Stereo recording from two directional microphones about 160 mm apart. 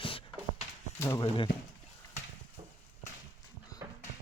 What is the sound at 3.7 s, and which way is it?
Dog, 20° left (ahead or behind).